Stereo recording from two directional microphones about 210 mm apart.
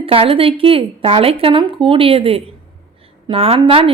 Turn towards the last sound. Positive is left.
turn(degrees=-25)  # may be behind; listen again after turning